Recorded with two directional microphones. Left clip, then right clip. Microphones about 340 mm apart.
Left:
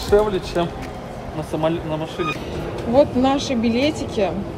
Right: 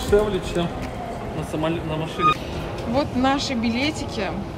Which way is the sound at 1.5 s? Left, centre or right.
Left.